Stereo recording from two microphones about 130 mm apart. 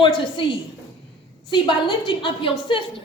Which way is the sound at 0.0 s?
40° left (ahead or behind).